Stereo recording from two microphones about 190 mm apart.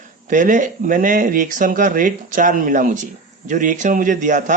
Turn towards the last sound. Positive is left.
turn(degrees=-40)  # may be behind; listen again after turning